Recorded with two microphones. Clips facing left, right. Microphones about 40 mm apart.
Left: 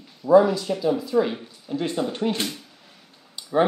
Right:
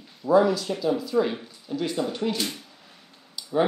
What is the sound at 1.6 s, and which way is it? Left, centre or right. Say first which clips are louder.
Speech: left 2 dB; left.